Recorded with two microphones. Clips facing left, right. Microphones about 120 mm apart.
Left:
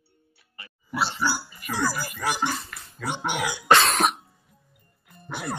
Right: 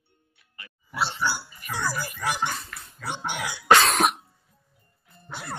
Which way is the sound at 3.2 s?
90° left.